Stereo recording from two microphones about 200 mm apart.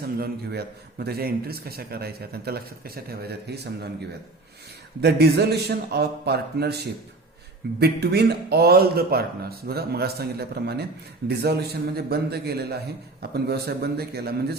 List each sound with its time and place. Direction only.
0.2 s a man's voice: 55° right (ahead or behind)
4.9 s a man's voice: 55° right (ahead or behind)
7.8 s a man's voice: 55° right (ahead or behind)